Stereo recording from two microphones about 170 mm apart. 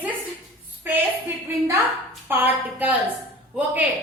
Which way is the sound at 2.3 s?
10° right (ahead or behind).